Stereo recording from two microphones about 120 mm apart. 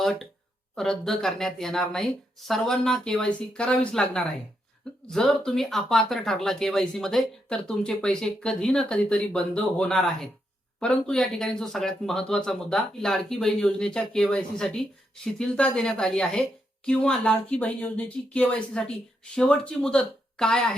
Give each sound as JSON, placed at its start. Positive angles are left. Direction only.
{"t": 0.0, "sound": "speech", "side_deg": 5}